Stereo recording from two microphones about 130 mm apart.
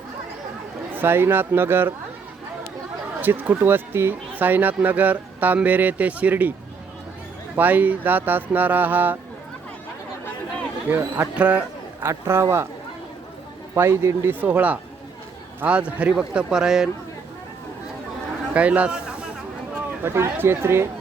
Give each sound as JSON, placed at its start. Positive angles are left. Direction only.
{"t": 0.9, "sound": "speech", "side_deg": -15}
{"t": 3.2, "sound": "speech", "side_deg": -15}
{"t": 7.5, "sound": "speech", "side_deg": -15}
{"t": 10.8, "sound": "speech", "side_deg": -15}
{"t": 12.0, "sound": "speech", "side_deg": -20}
{"t": 13.7, "sound": "speech", "side_deg": -20}
{"t": 18.5, "sound": "chatter", "side_deg": -10}
{"t": 20.0, "sound": "speech", "side_deg": -15}